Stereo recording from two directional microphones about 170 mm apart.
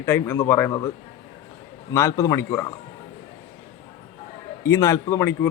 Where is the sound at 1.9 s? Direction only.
15° left (ahead or behind).